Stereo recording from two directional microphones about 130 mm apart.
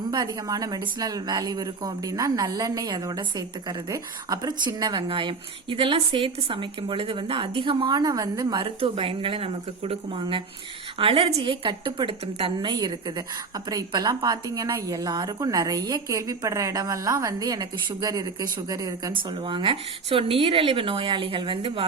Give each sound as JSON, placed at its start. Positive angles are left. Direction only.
{"t": 0.1, "sound": "a woman's voice", "side_deg": -30}
{"t": 11.6, "sound": "a woman's voice", "side_deg": -35}
{"t": 12.2, "sound": "speech", "side_deg": -50}
{"t": 12.6, "sound": "a woman's voice", "side_deg": -30}
{"t": 19.1, "sound": "speech", "side_deg": -40}